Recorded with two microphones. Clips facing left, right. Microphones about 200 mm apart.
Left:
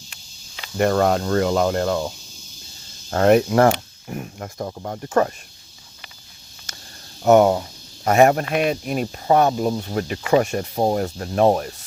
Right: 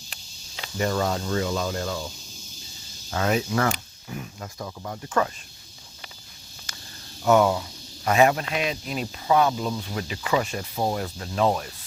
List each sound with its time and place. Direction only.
0.8 s speech: 60° left (ahead or behind); by 5.3 s 40° left (ahead or behind)
7.2 s speech: 45° left (ahead or behind)